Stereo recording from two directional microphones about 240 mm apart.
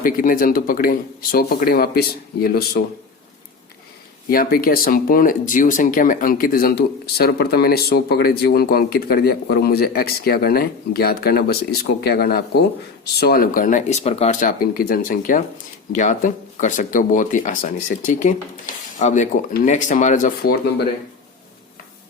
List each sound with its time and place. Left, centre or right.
0.0 s speech: left
4.3 s speech: left